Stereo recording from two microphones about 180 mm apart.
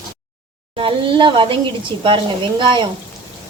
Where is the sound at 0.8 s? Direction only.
30° right (ahead or behind).